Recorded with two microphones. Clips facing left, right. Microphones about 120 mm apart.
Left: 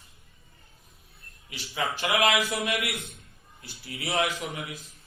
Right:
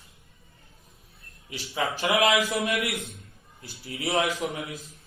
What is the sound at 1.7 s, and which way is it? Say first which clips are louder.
Speech: right 2 dB; 30° right (ahead or behind).